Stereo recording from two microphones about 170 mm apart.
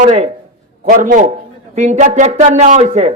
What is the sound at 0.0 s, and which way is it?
Speech, 45° right (ahead or behind).